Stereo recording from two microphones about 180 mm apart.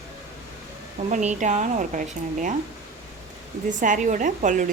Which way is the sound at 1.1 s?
40° right (ahead or behind).